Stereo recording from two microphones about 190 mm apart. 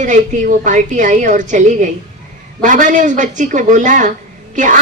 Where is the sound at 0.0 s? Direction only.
40° right (ahead or behind).